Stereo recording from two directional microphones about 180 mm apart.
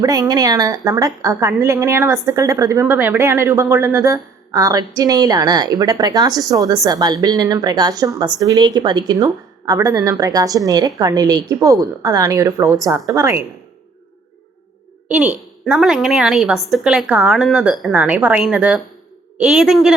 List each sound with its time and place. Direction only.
0.0 s a woman's voice: 20° right (ahead or behind)
15.0 s a woman's voice: 5° right (ahead or behind)